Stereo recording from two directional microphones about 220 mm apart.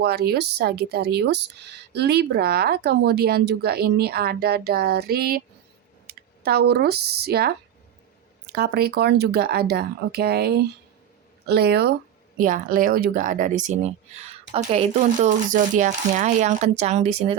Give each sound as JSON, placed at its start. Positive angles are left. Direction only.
{"t": 0.0, "sound": "speech", "side_deg": -45}